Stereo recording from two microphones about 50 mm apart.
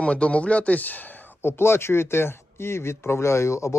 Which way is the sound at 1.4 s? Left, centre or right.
Left.